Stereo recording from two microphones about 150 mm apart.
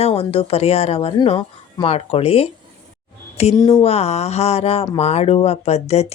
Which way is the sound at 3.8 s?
45° left (ahead or behind).